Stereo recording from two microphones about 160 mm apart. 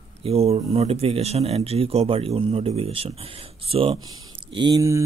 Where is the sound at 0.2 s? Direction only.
40° right (ahead or behind).